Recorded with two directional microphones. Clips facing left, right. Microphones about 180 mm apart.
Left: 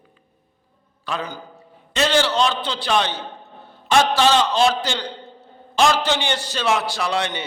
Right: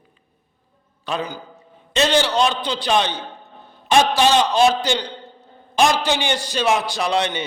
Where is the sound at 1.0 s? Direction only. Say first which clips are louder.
Right 2 dB; 15° right (ahead or behind).